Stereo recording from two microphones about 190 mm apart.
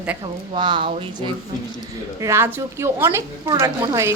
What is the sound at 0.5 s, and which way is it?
Speech, 25° right (ahead or behind).